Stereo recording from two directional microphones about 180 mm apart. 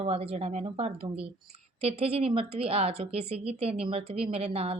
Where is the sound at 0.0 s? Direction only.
35° right (ahead or behind).